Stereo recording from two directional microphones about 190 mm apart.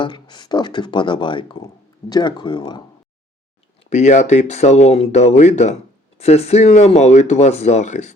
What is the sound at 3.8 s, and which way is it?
Speech, 35° left (ahead or behind).